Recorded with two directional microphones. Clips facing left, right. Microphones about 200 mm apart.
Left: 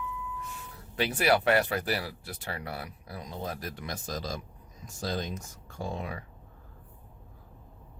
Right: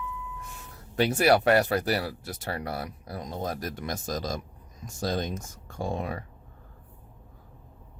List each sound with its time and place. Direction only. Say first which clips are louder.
0.9 s speech: right 4 dB; 45° right (ahead or behind)